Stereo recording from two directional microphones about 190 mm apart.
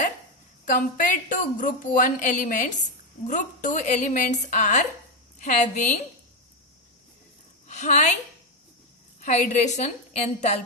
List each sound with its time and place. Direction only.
0.6 s a woman's voice: 45° left (ahead or behind)
7.7 s a woman's voice: 40° left (ahead or behind)
9.2 s a woman's voice: 40° left (ahead or behind)